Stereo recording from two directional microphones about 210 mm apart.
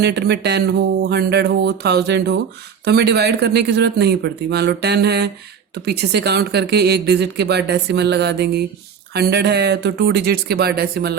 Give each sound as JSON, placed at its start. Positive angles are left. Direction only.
{"t": 0.0, "sound": "a woman's voice", "side_deg": -50}